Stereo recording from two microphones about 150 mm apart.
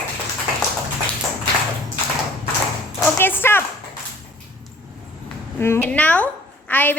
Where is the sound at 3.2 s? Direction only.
15° left (ahead or behind).